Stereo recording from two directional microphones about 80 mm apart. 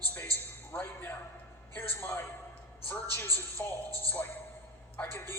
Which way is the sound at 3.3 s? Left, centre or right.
Left.